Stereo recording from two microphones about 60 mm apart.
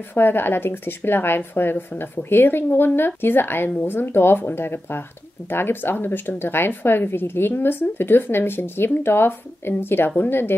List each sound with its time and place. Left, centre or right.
0.1 s speech: left